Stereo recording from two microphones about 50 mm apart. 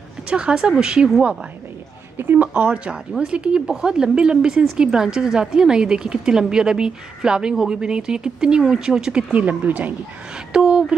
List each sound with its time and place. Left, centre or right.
0.3 s speech: centre
2.1 s speech: right; by 9.2 s centre
9.3 s a woman's voice: right
10.5 s speech: centre